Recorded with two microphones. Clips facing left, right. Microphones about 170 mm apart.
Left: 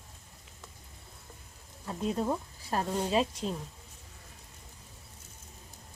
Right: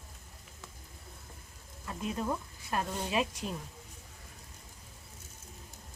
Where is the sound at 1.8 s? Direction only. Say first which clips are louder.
Left 4 dB; 30° left (ahead or behind).